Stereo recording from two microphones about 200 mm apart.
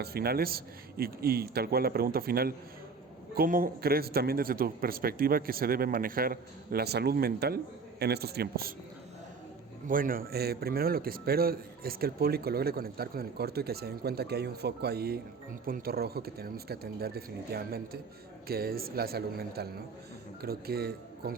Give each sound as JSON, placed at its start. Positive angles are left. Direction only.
{"t": 0.0, "sound": "speech", "side_deg": -50}
{"t": 9.8, "sound": "speech", "side_deg": -45}